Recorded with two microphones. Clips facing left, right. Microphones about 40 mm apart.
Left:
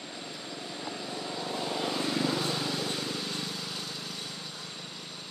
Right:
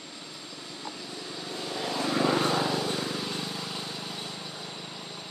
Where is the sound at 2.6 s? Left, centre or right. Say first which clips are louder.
Right 4 dB; centre.